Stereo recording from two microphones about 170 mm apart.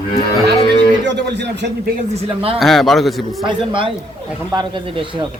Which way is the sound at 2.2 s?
35° right (ahead or behind).